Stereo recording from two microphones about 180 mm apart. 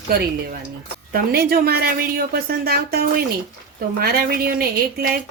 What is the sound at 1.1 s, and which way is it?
A woman's voice, 55° right (ahead or behind).